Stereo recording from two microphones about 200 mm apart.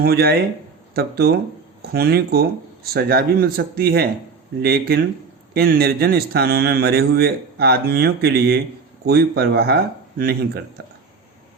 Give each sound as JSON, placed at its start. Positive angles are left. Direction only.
{"t": 0.0, "sound": "a man's voice", "side_deg": -50}